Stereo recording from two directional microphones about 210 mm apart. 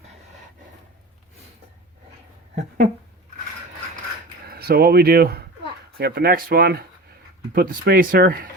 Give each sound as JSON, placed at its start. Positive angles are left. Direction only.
{"t": 2.6, "sound": "speech", "side_deg": -35}
{"t": 4.4, "sound": "speech", "side_deg": -45}